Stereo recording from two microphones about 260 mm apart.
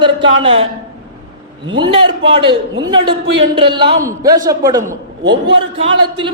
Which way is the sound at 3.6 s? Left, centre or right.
Centre.